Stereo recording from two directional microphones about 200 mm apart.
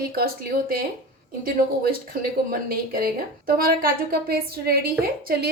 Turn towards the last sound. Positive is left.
turn(degrees=-50)  # may be behind; listen again after turning